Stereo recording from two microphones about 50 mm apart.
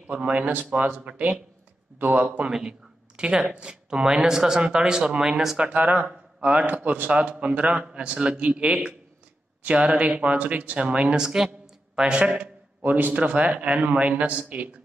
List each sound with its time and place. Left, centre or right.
0.0 s a man's voice: right
5.6 s a man's voice: right
11.1 s a man's voice: centre
12.8 s a man's voice: right